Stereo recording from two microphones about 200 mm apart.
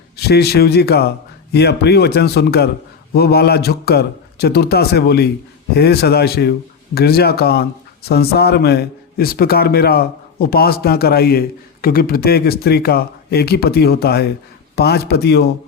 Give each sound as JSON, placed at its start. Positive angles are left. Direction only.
{"t": 0.2, "sound": "a man's voice", "side_deg": 55}